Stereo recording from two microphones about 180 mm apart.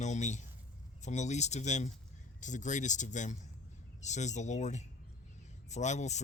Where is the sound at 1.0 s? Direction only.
40° left (ahead or behind).